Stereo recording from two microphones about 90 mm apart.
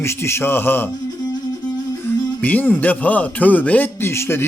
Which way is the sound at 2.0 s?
20° left (ahead or behind).